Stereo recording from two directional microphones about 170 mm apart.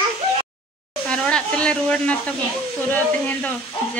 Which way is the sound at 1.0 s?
5° left (ahead or behind).